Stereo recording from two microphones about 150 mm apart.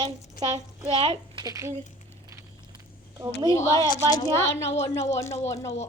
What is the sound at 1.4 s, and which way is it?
Speech, 20° right (ahead or behind).